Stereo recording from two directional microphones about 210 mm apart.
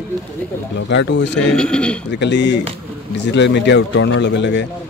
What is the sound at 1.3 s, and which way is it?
Speech, 5° left (ahead or behind).